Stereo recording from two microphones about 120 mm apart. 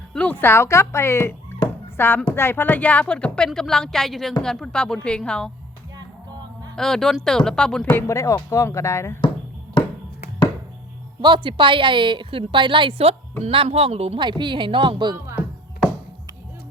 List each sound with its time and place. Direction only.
0.1 s a woman's voice: 10° left (ahead or behind)
6.7 s speech: 5° left (ahead or behind)
7.9 s speech: 25° left (ahead or behind)
11.2 s a woman's voice: 45° right (ahead or behind); by 14.2 s 60° right (ahead or behind)
14.2 s speech: 40° right (ahead or behind)